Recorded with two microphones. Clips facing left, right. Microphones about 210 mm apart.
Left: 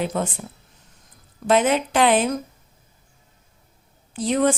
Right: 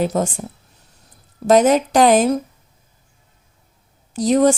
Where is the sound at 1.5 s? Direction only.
40° right (ahead or behind).